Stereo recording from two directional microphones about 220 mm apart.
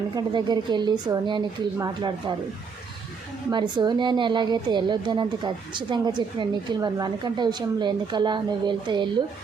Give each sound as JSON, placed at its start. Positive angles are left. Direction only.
{"t": 0.2, "sound": "a woman's voice", "side_deg": -20}
{"t": 3.5, "sound": "a woman's voice", "side_deg": -20}